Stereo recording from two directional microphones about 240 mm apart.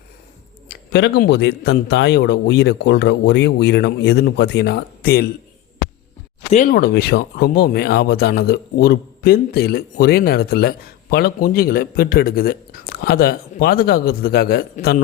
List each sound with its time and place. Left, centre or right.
0.7 s a man's voice: left
6.5 s speech: left